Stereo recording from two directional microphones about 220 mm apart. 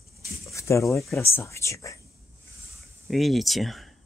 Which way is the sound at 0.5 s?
15° left (ahead or behind).